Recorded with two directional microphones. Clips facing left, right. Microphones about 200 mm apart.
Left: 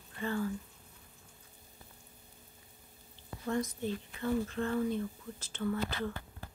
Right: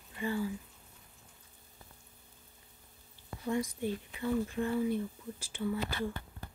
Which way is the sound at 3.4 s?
10° right (ahead or behind).